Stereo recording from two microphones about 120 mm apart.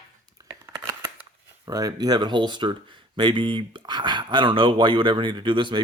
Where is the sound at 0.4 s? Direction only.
35° right (ahead or behind).